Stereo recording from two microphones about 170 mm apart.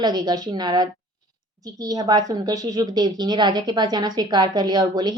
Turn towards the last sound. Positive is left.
turn(degrees=-25)  # may be behind; listen again after turning